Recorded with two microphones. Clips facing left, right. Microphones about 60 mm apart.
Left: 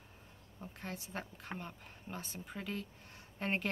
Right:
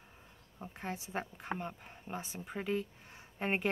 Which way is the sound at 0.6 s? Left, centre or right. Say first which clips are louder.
Right 4 dB; right.